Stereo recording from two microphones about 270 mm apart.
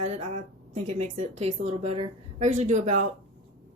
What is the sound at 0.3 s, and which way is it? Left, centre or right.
Speech, right.